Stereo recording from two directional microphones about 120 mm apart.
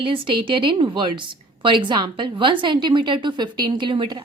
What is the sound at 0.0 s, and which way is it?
A woman's voice, 45° right (ahead or behind).